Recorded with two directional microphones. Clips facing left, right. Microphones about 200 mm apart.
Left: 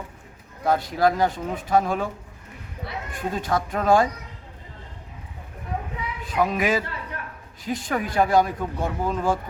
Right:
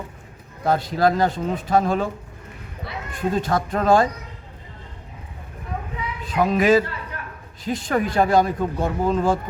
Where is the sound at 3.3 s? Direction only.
10° left (ahead or behind).